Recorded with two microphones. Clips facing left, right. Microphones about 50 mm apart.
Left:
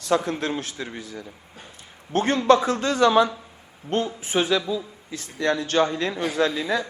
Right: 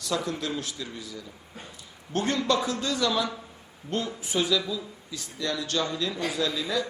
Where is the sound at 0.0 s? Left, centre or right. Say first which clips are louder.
Left 6 dB; left.